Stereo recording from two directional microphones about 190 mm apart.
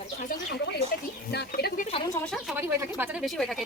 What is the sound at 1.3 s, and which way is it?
Speech, 60° left (ahead or behind).